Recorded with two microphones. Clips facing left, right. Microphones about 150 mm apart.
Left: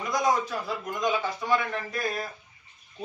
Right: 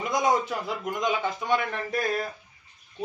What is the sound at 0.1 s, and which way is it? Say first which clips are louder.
A man's voice: right 1 dB; 20° right (ahead or behind).